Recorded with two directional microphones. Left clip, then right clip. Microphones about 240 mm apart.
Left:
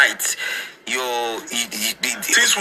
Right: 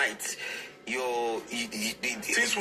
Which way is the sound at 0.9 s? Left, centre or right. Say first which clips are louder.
Left 7 dB; left.